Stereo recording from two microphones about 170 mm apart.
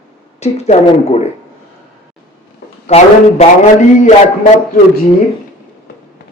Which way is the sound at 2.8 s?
40° left (ahead or behind).